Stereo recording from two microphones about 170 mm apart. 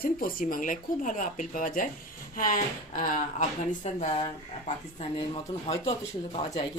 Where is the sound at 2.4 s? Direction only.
50° left (ahead or behind).